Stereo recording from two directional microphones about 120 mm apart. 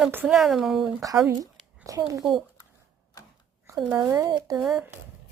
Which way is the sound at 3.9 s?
25° right (ahead or behind).